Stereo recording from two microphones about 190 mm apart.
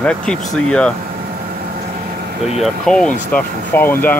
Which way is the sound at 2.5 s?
Centre (ahead or behind).